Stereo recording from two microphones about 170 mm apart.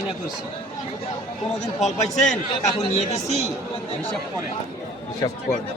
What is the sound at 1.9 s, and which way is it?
A man's voice, 45° left (ahead or behind).